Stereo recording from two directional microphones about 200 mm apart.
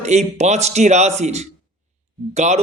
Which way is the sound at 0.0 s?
35° right (ahead or behind).